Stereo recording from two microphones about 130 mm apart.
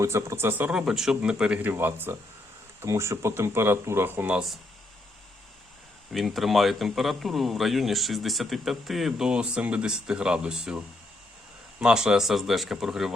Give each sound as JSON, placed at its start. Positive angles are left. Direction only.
{"t": 0.0, "sound": "speech", "side_deg": -20}
{"t": 0.7, "sound": "speech", "side_deg": -5}
{"t": 6.1, "sound": "a man's voice", "side_deg": 0}